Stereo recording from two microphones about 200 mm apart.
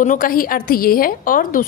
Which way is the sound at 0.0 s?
40° left (ahead or behind).